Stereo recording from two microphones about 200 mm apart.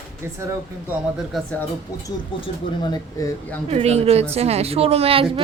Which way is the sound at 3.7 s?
30° right (ahead or behind).